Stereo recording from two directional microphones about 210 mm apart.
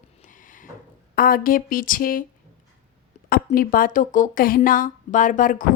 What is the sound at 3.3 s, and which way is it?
A woman's voice, 40° left (ahead or behind).